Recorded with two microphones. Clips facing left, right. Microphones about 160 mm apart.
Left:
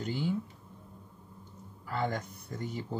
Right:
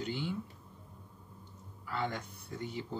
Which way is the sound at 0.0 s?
45° left (ahead or behind).